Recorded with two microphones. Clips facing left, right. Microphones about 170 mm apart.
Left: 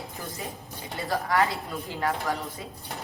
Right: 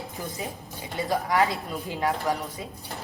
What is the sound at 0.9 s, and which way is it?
Speech, 15° right (ahead or behind).